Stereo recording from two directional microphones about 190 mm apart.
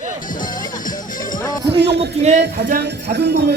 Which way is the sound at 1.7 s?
60° right (ahead or behind).